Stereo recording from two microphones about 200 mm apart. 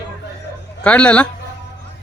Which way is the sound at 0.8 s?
5° left (ahead or behind).